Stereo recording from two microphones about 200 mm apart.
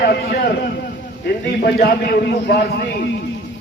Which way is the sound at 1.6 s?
55° left (ahead or behind).